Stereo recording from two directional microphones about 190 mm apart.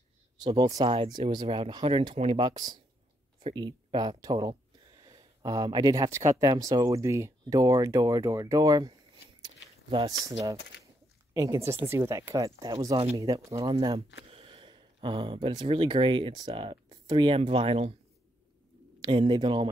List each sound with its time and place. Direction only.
0.4 s speech: 20° right (ahead or behind)
9.4 s a sound: 25° right (ahead or behind)
11.3 s speech: 15° right (ahead or behind)
18.9 s speech: 25° right (ahead or behind)